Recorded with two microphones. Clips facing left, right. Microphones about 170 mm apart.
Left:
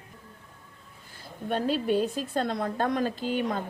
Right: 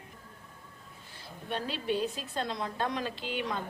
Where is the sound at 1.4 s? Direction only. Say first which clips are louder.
Left 7 dB; 45° left (ahead or behind).